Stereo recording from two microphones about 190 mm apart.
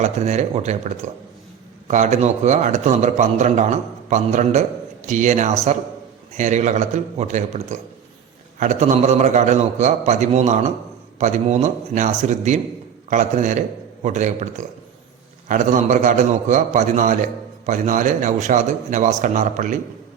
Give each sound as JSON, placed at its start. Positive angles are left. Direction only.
{"t": 0.0, "sound": "a man's voice", "side_deg": -35}